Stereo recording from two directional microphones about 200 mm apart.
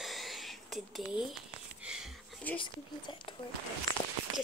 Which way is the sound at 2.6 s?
25° left (ahead or behind).